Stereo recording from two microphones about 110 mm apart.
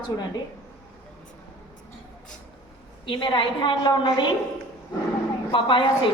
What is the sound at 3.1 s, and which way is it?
A woman's voice, 50° left (ahead or behind).